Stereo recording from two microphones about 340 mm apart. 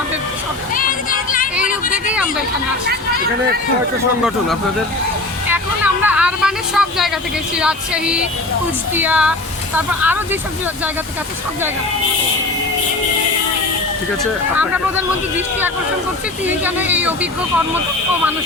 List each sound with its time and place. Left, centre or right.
0.7 s a sound: left
5.5 s speech: centre
14.5 s speech: centre
16.5 s speech: centre